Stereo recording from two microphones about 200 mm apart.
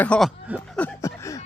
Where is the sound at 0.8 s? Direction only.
15° left (ahead or behind).